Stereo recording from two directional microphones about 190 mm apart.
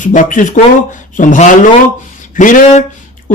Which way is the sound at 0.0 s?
45° left (ahead or behind).